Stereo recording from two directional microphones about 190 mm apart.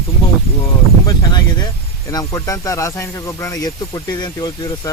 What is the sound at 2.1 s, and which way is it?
Speech, 15° left (ahead or behind).